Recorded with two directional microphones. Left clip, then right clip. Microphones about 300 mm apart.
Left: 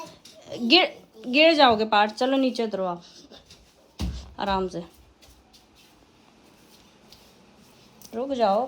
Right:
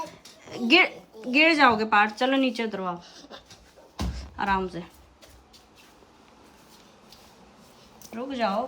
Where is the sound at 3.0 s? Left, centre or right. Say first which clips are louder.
Right 3 dB; centre.